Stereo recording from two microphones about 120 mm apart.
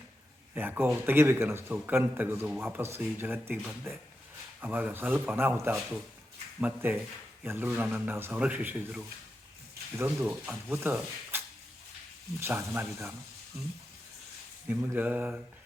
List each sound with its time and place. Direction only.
0.5 s a man's voice: 15° right (ahead or behind)
14.7 s a man's voice: 15° right (ahead or behind)